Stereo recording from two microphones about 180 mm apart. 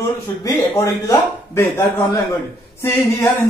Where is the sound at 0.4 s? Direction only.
15° left (ahead or behind).